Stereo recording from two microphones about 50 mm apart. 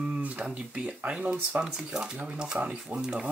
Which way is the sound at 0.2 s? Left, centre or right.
Right.